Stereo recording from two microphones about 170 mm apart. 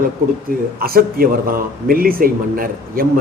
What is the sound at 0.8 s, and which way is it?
A man's voice, 60° right (ahead or behind).